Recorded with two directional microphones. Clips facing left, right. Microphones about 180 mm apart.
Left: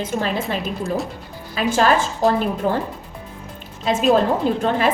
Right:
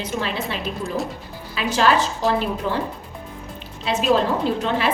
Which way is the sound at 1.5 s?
45° left (ahead or behind).